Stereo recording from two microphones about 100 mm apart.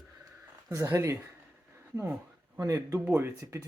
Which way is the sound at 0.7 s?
30° right (ahead or behind).